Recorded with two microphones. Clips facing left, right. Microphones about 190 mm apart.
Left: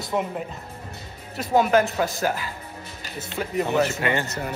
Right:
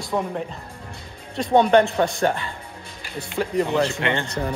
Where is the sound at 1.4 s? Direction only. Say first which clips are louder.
Right 3 dB; 5° left (ahead or behind).